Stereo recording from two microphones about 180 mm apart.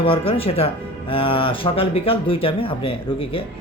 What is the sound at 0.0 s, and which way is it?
Speech, 30° left (ahead or behind).